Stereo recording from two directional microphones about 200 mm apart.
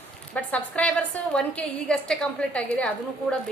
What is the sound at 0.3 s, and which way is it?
A woman's voice, 5° left (ahead or behind).